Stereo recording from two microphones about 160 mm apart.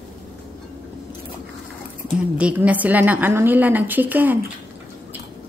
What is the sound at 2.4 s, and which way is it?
A woman's voice, 10° right (ahead or behind).